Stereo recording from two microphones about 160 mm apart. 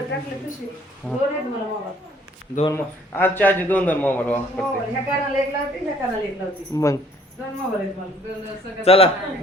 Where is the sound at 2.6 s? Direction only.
15° left (ahead or behind).